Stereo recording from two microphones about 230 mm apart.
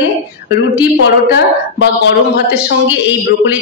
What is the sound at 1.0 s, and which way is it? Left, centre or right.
Speech, left.